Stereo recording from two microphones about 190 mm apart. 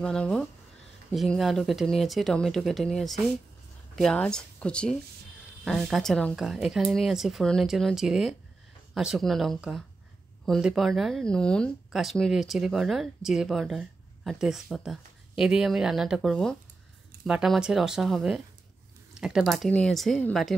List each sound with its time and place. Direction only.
0.0 s speech: 5° left (ahead or behind)